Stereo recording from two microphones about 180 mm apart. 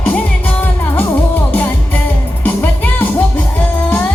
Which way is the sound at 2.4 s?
10° left (ahead or behind).